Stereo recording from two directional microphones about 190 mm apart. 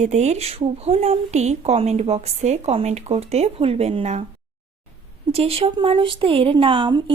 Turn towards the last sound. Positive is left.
turn(degrees=-25)  # may be behind; listen again after turning